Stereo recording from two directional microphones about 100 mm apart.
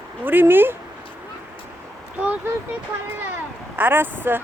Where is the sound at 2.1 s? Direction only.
15° right (ahead or behind).